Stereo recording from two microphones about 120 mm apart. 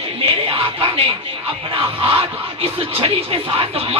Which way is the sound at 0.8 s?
50° right (ahead or behind).